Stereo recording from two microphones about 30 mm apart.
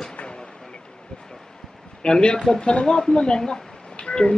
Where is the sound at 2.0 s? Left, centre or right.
Left.